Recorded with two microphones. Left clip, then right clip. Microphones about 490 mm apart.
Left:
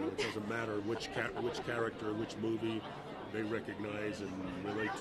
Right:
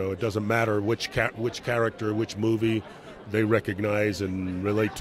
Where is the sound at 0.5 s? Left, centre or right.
Right.